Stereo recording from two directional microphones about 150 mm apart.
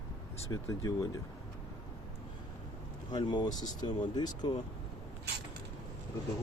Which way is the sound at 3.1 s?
30° left (ahead or behind).